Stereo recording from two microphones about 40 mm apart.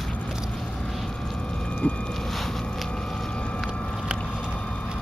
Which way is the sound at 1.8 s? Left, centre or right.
Left.